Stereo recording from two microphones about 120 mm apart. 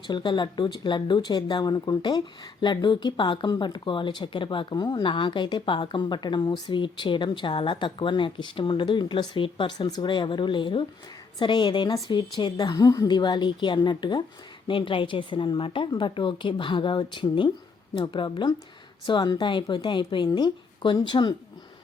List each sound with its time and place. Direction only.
0.1 s a woman's voice: 40° left (ahead or behind)